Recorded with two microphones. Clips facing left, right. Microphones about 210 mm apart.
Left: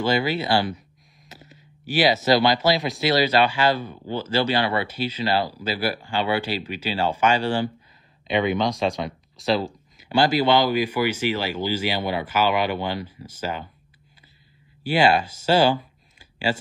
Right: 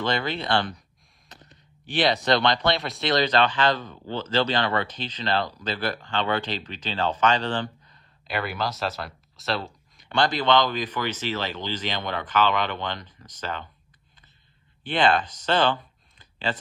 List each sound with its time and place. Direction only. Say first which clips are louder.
0.0 s speech: left 4 dB; 5° left (ahead or behind)
8.6 s speech: left 6 dB; 5° right (ahead or behind)
14.8 s speech: left 3 dB; 10° left (ahead or behind)